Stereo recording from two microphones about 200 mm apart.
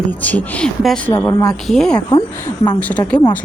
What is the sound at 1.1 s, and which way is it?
Speech, 20° left (ahead or behind).